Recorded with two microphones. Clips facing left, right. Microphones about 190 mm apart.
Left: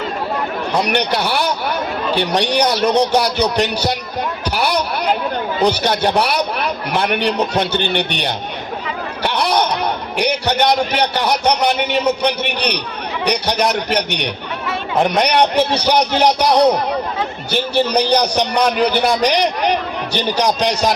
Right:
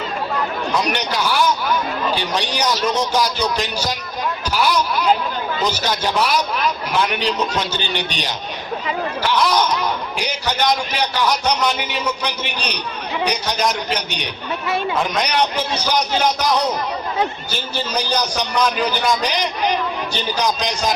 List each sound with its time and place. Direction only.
0.8 s a man's voice: 65° left (ahead or behind)
4.5 s a sound: 60° left (ahead or behind)
5.6 s a man's voice: 60° left (ahead or behind)